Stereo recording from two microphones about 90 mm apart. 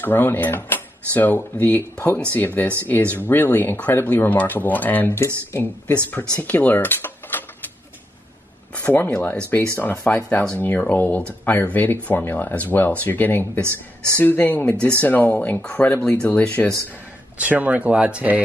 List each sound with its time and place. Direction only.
0.0 s speech: 20° left (ahead or behind)
6.4 s mechanisms: 20° left (ahead or behind)
8.9 s speech: 25° left (ahead or behind)
17.4 s speech: 15° right (ahead or behind)